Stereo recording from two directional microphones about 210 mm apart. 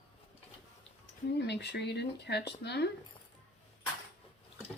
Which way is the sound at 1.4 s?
55° left (ahead or behind).